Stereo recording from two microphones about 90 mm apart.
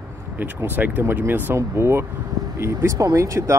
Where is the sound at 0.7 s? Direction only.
20° right (ahead or behind).